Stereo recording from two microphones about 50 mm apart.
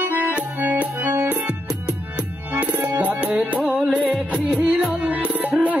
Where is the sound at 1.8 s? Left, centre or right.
Right.